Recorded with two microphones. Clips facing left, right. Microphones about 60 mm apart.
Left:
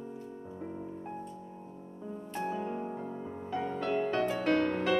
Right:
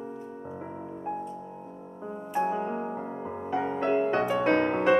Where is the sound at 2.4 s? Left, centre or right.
Right.